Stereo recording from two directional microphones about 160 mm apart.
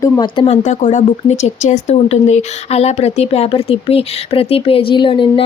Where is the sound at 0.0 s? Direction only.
25° left (ahead or behind).